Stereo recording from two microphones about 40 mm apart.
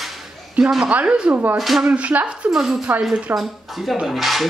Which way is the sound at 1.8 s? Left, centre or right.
Right.